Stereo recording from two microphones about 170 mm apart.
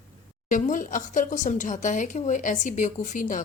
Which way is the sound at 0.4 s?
50° left (ahead or behind).